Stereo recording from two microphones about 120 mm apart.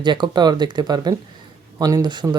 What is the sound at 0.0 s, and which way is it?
Speech, 40° right (ahead or behind).